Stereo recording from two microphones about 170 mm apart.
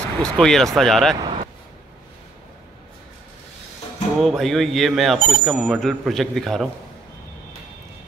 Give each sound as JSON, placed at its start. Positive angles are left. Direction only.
{"t": 0.2, "sound": "speech", "side_deg": 5}
{"t": 1.2, "sound": "a sound", "side_deg": -35}
{"t": 4.2, "sound": "speech", "side_deg": 0}